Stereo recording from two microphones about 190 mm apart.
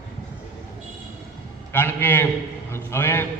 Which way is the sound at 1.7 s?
10° left (ahead or behind).